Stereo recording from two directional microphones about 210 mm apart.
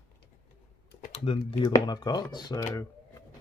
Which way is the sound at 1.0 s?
30° left (ahead or behind).